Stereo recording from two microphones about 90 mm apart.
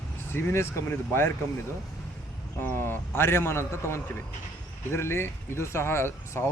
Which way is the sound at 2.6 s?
20° left (ahead or behind).